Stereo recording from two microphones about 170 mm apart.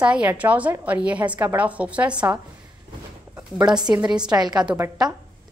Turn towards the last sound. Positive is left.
turn(degrees=-15)  # may be behind; listen again after turning